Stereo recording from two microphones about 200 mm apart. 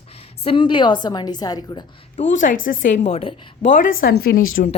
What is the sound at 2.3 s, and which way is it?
A woman's voice, 40° left (ahead or behind).